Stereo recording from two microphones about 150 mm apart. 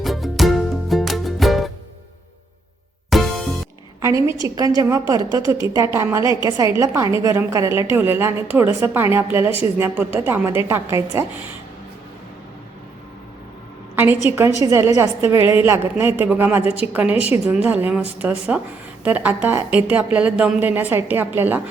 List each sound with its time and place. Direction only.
0.0 s music: centre (ahead or behind)
3.1 s music: centre (ahead or behind)
4.0 s a woman's voice: 20° right (ahead or behind)
13.9 s a woman's voice: 15° right (ahead or behind)